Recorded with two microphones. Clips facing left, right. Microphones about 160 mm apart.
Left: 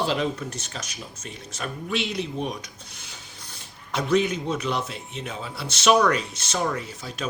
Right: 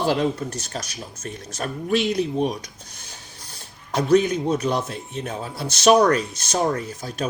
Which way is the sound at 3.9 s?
40° right (ahead or behind).